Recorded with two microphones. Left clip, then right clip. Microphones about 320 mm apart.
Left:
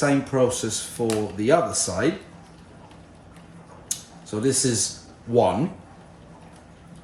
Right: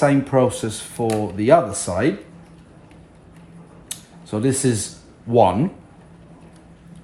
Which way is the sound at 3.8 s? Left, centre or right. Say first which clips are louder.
Left 1 dB; centre.